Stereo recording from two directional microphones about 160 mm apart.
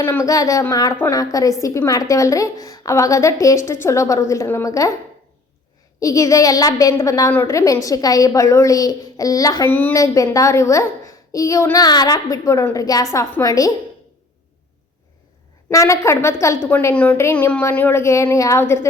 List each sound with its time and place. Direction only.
0.0 s a woman's voice: 15° left (ahead or behind)
6.0 s a woman's voice: 20° left (ahead or behind)
15.7 s a woman's voice: 20° left (ahead or behind)